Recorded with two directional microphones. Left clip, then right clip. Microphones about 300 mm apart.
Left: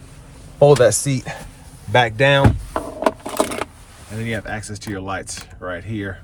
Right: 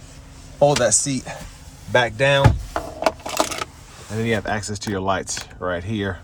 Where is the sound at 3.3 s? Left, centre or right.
Centre.